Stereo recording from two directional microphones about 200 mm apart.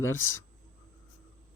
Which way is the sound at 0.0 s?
90° left.